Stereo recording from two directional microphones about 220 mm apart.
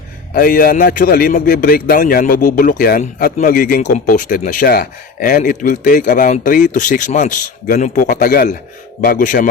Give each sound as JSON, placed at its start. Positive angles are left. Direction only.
{"t": 0.3, "sound": "a man's voice", "side_deg": 40}